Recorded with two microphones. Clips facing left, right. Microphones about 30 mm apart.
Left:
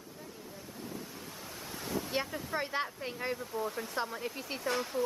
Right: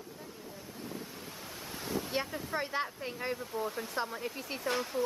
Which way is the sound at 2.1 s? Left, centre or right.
Centre.